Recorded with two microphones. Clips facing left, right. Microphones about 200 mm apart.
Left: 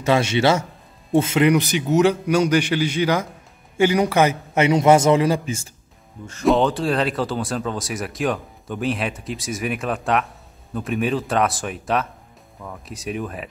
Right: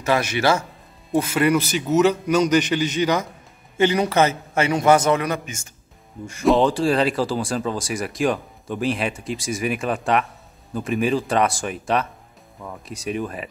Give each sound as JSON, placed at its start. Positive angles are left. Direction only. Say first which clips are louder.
{"t": 0.0, "sound": "a man's voice", "louder": "left 2 dB", "side_deg": 25}
{"t": 6.4, "sound": "speech", "louder": "right 1 dB", "side_deg": 0}